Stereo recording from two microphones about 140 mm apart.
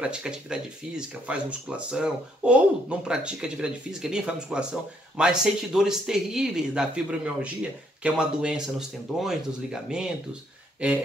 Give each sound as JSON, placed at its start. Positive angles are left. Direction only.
{"t": 0.0, "sound": "speech", "side_deg": -5}